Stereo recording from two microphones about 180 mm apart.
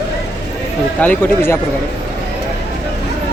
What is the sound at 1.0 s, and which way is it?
Speech, 10° left (ahead or behind).